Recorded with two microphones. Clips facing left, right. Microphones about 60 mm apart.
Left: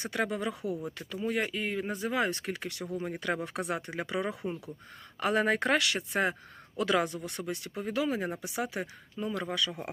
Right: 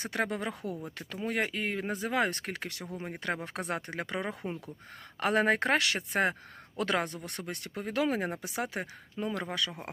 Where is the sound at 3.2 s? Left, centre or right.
Right.